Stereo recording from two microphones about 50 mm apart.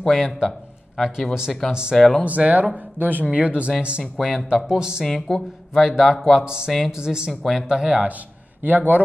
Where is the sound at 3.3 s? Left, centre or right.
Right.